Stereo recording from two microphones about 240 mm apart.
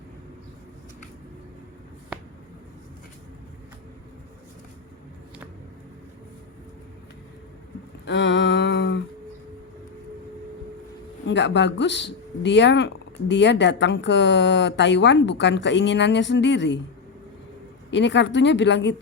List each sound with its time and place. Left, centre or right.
8.0 s a sound: left
11.3 s speech: left
17.9 s speech: left